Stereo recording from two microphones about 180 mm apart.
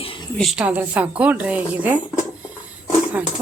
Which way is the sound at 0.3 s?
Centre (ahead or behind).